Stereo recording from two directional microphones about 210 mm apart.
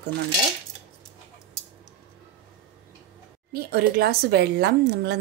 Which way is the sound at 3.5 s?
45° right (ahead or behind).